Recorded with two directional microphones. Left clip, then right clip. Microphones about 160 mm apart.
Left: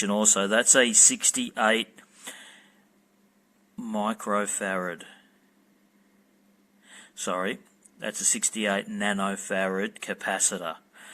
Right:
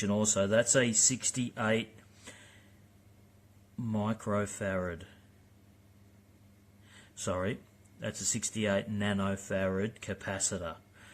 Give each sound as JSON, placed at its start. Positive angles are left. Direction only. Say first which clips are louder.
{"t": 0.0, "sound": "speech", "louder": "left 6 dB", "side_deg": 25}
{"t": 3.8, "sound": "speech", "louder": "left 7 dB", "side_deg": 20}
{"t": 6.8, "sound": "speech", "louder": "left 5 dB", "side_deg": 15}